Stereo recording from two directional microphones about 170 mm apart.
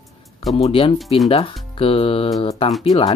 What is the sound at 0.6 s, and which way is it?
Speech, 30° left (ahead or behind).